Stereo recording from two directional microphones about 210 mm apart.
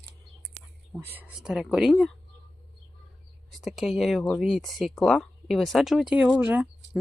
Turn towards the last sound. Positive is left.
turn(degrees=-5)  # may be behind; listen again after turning